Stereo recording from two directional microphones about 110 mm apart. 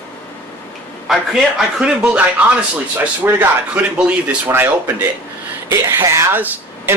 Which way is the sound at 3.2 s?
20° right (ahead or behind).